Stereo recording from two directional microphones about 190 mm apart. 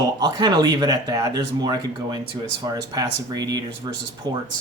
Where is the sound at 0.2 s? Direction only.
20° right (ahead or behind).